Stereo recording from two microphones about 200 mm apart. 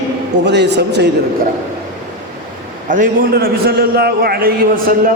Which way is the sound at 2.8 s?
40° right (ahead or behind).